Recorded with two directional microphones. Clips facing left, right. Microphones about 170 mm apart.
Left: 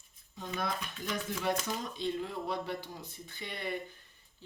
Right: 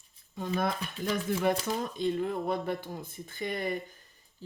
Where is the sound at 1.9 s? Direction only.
50° right (ahead or behind).